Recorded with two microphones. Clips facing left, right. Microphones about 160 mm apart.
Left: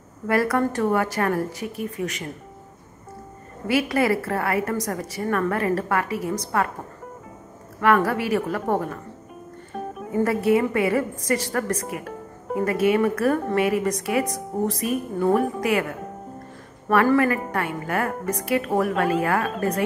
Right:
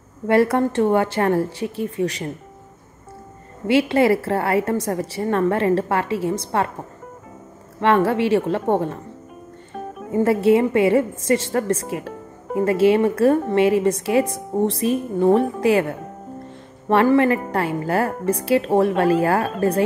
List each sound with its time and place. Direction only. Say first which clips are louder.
0.3 s a woman's voice: right 4 dB; 25° right (ahead or behind)
3.6 s a woman's voice: right 5 dB; 25° right (ahead or behind)
7.8 s a woman's voice: right 3 dB; 25° right (ahead or behind)
9.8 s music: even; centre (ahead or behind)
10.1 s a woman's voice: right 4 dB; 25° right (ahead or behind)